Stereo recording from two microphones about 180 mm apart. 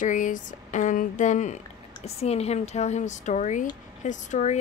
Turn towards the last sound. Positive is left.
turn(degrees=40)  # may be behind; listen again after turning